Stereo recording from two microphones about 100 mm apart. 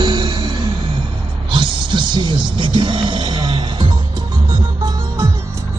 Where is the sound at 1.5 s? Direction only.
55° right (ahead or behind).